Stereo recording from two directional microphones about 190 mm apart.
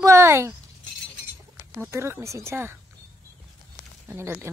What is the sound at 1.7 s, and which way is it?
Speech, 15° right (ahead or behind).